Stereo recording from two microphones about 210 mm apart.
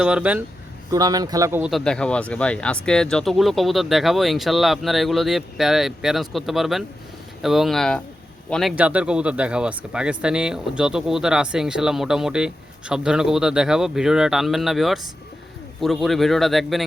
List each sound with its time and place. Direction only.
0.0 s speech: 5° right (ahead or behind)
0.9 s a man's voice: 15° right (ahead or behind)
1.7 s speech: 5° left (ahead or behind)